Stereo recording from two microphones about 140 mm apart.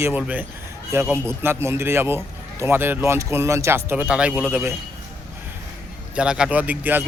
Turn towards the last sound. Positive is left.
turn(degrees=-10)  # may be behind; listen again after turning